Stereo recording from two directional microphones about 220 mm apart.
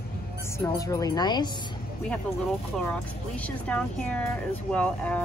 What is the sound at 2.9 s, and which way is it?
Speech, 5° left (ahead or behind).